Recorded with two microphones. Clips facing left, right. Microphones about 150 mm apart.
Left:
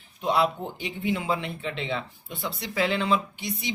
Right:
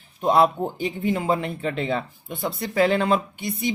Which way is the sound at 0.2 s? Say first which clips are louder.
Right 6 dB; 45° right (ahead or behind).